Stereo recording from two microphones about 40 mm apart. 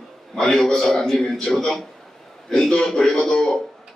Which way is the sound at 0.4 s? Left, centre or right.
Centre.